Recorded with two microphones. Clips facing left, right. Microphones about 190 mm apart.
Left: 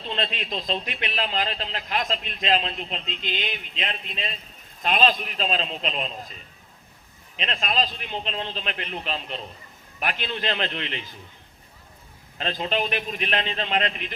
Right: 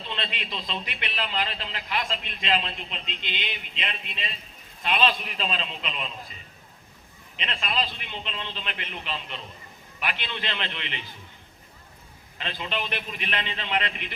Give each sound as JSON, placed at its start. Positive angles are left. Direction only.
{"t": 0.1, "sound": "a man's voice", "side_deg": 40}
{"t": 7.4, "sound": "a man's voice", "side_deg": 40}
{"t": 12.4, "sound": "a man's voice", "side_deg": 40}